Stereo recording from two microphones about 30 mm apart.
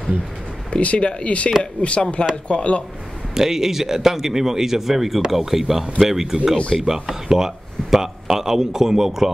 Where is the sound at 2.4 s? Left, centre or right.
Left.